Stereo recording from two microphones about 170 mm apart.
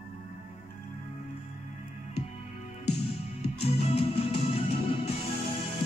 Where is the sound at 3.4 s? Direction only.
35° left (ahead or behind).